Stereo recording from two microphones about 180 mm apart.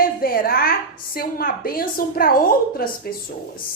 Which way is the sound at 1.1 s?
55° left (ahead or behind).